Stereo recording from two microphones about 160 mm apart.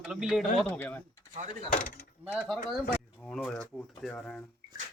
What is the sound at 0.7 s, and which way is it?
Speech, 10° left (ahead or behind).